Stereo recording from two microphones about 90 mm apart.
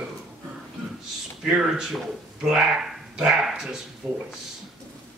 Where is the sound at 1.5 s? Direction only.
5° right (ahead or behind).